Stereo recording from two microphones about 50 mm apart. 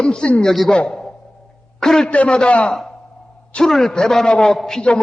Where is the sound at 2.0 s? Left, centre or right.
Left.